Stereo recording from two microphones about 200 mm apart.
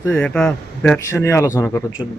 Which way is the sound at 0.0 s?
5° left (ahead or behind).